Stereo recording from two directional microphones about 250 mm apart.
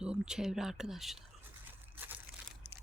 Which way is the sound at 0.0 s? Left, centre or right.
Centre.